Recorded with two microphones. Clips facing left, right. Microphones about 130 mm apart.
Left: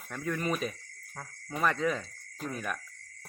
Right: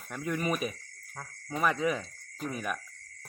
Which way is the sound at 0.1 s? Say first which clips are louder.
Right 1 dB; 10° right (ahead or behind).